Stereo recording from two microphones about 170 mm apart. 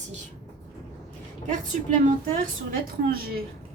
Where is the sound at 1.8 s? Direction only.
50° right (ahead or behind).